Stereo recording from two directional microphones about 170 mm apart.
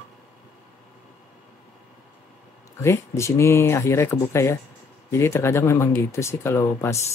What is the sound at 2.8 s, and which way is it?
Speech, 15° left (ahead or behind).